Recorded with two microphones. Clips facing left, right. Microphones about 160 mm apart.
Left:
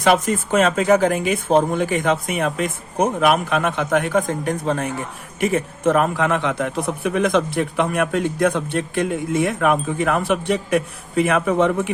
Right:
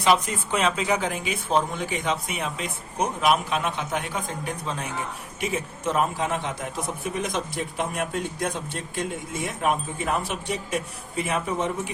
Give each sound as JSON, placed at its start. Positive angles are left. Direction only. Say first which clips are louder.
{"t": 0.0, "sound": "a man's voice", "louder": "left 5 dB", "side_deg": 45}